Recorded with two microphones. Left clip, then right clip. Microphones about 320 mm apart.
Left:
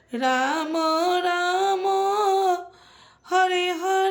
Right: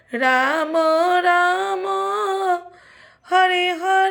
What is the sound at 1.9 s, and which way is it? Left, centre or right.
Music, left.